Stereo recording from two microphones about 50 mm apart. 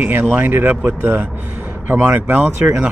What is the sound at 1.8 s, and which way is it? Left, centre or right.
Speech, right.